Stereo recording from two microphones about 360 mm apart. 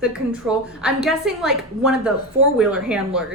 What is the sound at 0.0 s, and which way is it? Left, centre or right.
A woman's voice, centre.